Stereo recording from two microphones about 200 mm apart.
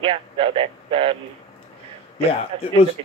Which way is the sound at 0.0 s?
25° right (ahead or behind).